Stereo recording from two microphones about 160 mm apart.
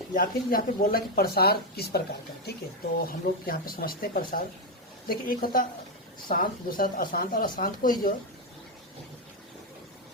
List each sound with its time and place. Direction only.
0.1 s speech: 60° left (ahead or behind); by 2.0 s 75° left (ahead or behind)
2.5 s speech: 90° left
3.1 s speech: 65° left (ahead or behind)